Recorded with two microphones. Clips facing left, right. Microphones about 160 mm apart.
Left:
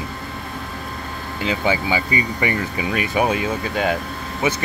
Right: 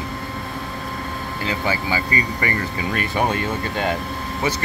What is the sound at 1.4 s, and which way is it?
Speech, 20° left (ahead or behind).